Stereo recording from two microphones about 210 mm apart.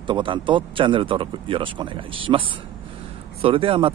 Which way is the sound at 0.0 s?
25° right (ahead or behind).